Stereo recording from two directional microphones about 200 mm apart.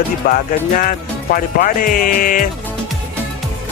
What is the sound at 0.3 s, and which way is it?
Speech, 45° left (ahead or behind).